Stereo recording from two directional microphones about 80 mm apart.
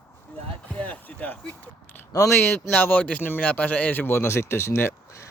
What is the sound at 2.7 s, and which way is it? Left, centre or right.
A man's voice, left.